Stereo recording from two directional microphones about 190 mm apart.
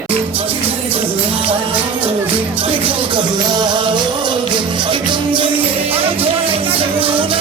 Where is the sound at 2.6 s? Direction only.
30° right (ahead or behind).